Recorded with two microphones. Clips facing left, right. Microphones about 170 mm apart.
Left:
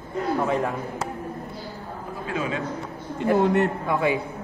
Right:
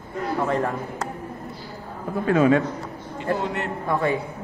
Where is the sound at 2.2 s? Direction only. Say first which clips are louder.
Right 11 dB; 55° right (ahead or behind).